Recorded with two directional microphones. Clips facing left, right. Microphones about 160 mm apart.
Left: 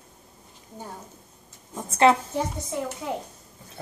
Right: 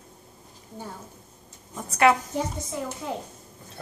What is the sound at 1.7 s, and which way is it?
Speech, 25° left (ahead or behind).